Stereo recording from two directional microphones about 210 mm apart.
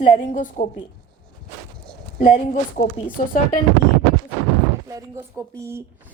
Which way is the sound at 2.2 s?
35° left (ahead or behind).